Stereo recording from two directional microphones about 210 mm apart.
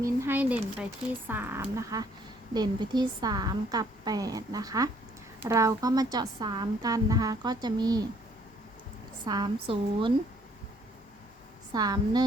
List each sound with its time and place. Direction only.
0.0 s speech: 10° right (ahead or behind)
9.2 s speech: 20° right (ahead or behind)
11.7 s speech: 20° right (ahead or behind)